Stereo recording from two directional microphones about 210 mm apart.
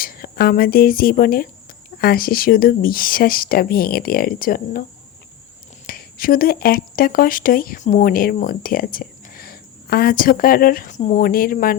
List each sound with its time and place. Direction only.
0.0 s speech: 45° left (ahead or behind)
5.8 s speech: 45° left (ahead or behind)